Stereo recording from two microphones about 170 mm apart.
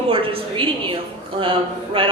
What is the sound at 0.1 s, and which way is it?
Speech, 30° right (ahead or behind).